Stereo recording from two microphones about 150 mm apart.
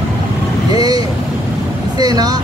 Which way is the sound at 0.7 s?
25° right (ahead or behind).